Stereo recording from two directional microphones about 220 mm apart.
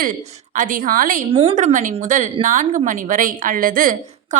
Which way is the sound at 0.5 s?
35° right (ahead or behind).